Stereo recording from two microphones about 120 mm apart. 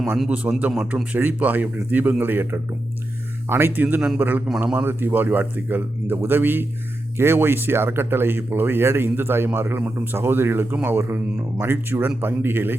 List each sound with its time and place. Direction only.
0.0 s a man's voice: centre (ahead or behind)
0.3 s speech: 10° right (ahead or behind)